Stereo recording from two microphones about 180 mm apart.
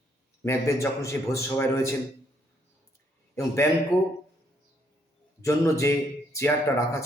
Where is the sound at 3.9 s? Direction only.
20° left (ahead or behind).